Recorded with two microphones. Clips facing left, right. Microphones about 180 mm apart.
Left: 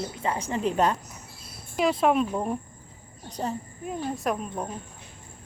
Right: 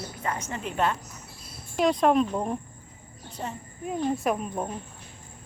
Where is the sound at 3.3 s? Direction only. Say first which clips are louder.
Left 5 dB; 35° left (ahead or behind).